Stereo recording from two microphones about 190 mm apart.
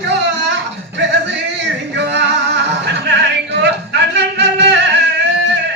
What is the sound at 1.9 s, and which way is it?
Music, 65° right (ahead or behind).